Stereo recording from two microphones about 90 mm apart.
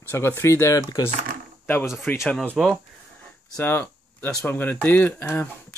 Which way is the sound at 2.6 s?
Centre (ahead or behind).